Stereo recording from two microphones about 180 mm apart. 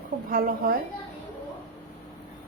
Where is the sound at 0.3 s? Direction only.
55° right (ahead or behind).